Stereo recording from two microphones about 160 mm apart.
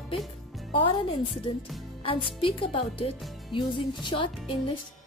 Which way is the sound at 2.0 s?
35° left (ahead or behind).